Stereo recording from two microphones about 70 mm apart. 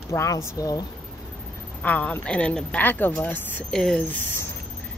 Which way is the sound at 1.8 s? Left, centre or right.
Left.